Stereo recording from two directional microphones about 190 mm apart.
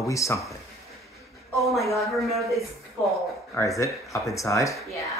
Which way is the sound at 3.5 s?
15° left (ahead or behind).